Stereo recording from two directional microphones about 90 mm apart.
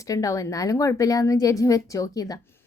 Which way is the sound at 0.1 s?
40° left (ahead or behind).